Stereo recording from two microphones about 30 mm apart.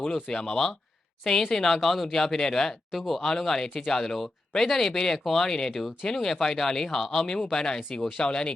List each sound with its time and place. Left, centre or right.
0.0 s speech: centre
3.0 s speech: centre
7.5 s speech: left